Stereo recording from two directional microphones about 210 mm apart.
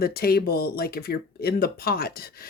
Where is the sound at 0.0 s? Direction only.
45° left (ahead or behind).